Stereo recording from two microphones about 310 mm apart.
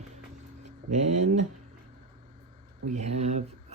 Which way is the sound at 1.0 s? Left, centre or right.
Right.